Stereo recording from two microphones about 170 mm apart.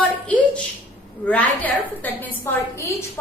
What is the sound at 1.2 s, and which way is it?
A woman's voice, 10° left (ahead or behind).